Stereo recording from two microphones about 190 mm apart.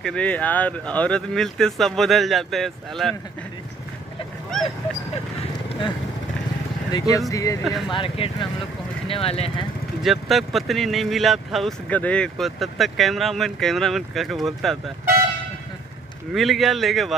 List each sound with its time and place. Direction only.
0.0 s speech: 5° left (ahead or behind)
6.9 s speech: 20° left (ahead or behind)
10.0 s speech: centre (ahead or behind)
16.3 s speech: centre (ahead or behind)